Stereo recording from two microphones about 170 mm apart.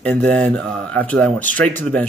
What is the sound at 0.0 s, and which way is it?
Speech, 10° left (ahead or behind).